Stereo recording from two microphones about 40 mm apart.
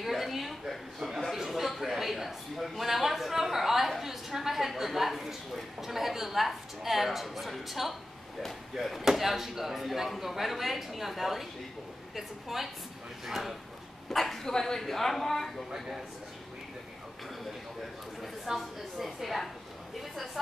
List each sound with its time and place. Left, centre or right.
0.0 s a woman's voice: centre
1.3 s a sound: centre
4.0 s a woman's voice: centre
14.1 s speech: centre
14.5 s speech: centre
18.5 s speech: centre